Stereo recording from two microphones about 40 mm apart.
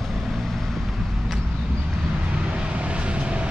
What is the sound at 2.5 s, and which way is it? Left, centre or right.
Vehicle, right.